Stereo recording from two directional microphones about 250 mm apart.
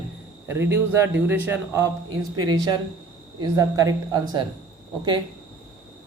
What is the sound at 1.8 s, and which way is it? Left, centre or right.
Speech, right.